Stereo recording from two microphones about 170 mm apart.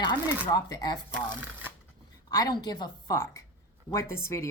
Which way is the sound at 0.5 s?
25° left (ahead or behind).